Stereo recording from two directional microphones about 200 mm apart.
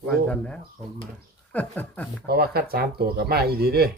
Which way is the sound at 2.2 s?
50° right (ahead or behind).